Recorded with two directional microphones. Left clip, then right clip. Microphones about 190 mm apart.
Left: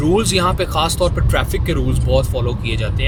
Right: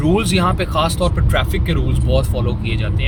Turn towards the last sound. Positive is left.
turn(degrees=10)  # may be behind; listen again after turning